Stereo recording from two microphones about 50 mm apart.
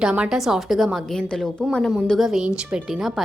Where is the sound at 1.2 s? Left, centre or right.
Centre.